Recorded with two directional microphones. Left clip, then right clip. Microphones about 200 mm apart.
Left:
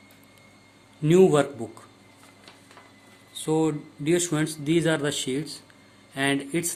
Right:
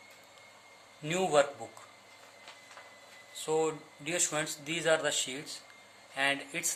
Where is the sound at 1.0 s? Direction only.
30° left (ahead or behind).